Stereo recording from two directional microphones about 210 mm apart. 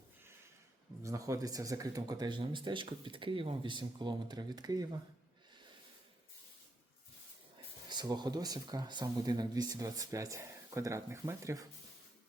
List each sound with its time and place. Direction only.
1.0 s speech: 15° right (ahead or behind)
7.9 s speech: 20° right (ahead or behind)